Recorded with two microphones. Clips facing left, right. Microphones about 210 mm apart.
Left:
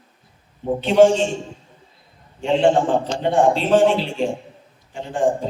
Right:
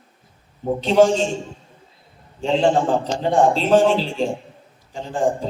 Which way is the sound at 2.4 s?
40° right (ahead or behind).